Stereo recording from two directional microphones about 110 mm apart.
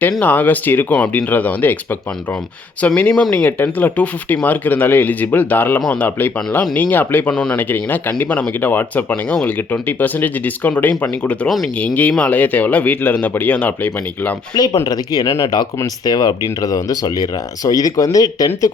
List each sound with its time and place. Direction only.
0.2 s speech: 15° left (ahead or behind)
2.8 s speech: 15° left (ahead or behind)
14.5 s speech: 40° left (ahead or behind)